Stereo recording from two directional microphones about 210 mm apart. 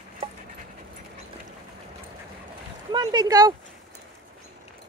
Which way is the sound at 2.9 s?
20° right (ahead or behind).